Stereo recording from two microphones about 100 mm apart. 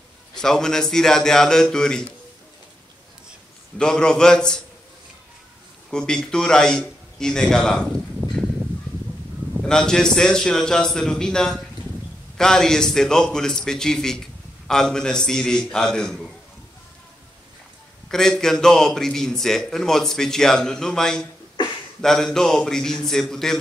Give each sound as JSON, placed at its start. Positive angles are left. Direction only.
{"t": 0.3, "sound": "a man's voice", "side_deg": 5}
{"t": 3.7, "sound": "a man's voice", "side_deg": 5}
{"t": 5.9, "sound": "a man's voice", "side_deg": 5}
{"t": 8.2, "sound": "a sound", "side_deg": -15}
{"t": 9.6, "sound": "a man's voice", "side_deg": 5}
{"t": 18.0, "sound": "a man's voice", "side_deg": 5}